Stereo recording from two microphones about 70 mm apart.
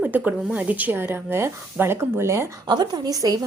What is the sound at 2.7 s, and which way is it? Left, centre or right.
Speech, right.